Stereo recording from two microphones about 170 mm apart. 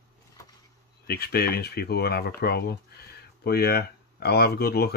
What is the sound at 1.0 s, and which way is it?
Speech, 65° left (ahead or behind).